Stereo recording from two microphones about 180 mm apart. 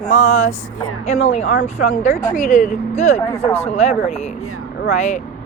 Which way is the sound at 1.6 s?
40° left (ahead or behind).